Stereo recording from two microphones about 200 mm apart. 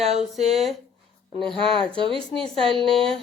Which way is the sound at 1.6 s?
25° right (ahead or behind).